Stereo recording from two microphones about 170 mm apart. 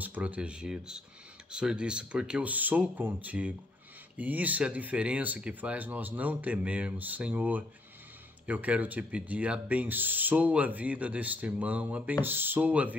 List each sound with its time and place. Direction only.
0.0 s speech: 10° right (ahead or behind)